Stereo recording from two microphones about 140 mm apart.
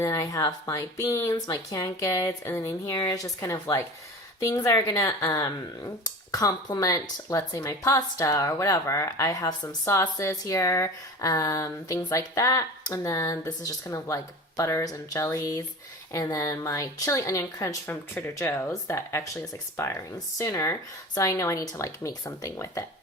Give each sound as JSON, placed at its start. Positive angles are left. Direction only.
{"t": 0.0, "sound": "a woman's voice", "side_deg": 20}